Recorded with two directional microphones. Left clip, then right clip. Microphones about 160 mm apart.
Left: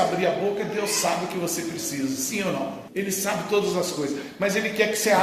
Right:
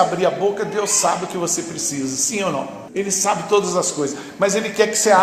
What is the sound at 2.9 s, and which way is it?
A man's voice, 30° right (ahead or behind).